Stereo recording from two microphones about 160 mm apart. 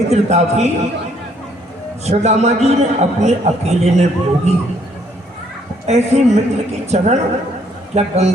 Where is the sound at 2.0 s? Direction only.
45° right (ahead or behind).